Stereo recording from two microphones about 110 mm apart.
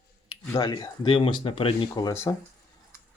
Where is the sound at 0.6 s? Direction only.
40° left (ahead or behind).